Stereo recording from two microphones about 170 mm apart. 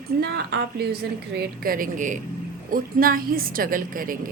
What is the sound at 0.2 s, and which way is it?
A woman's voice, 70° right (ahead or behind).